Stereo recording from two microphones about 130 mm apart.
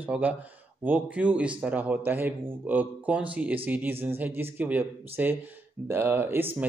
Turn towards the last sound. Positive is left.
turn(degrees=-15)  # may be behind; listen again after turning